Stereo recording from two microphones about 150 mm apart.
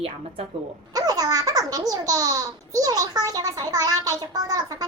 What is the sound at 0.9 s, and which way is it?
Baby laughter, 25° right (ahead or behind).